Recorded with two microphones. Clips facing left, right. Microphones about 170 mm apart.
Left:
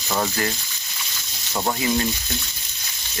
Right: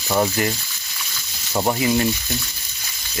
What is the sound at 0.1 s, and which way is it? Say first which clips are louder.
Speech: right 4 dB; 15° right (ahead or behind).